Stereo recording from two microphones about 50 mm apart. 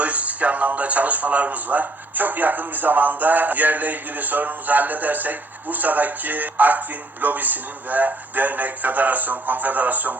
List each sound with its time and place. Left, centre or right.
0.0 s a man's voice: right